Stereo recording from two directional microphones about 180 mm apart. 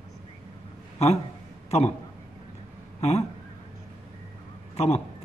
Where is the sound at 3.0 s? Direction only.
35° left (ahead or behind).